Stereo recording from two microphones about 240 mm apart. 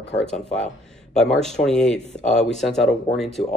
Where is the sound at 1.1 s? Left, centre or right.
Centre.